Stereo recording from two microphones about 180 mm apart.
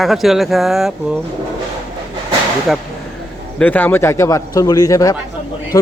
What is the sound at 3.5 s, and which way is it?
A man's voice, 10° left (ahead or behind).